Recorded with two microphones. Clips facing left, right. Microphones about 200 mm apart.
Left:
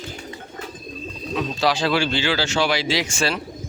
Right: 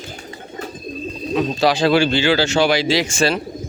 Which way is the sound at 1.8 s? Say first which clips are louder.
Right 6 dB; 55° right (ahead or behind).